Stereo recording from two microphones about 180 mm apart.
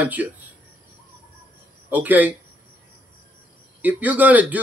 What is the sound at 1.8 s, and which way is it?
Speech, 10° right (ahead or behind).